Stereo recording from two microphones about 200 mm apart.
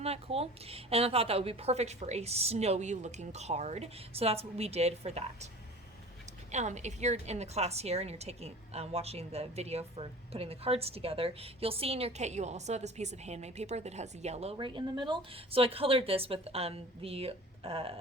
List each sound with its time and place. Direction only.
0.0 s a woman's voice: 30° right (ahead or behind)
6.5 s a woman's voice: 35° right (ahead or behind)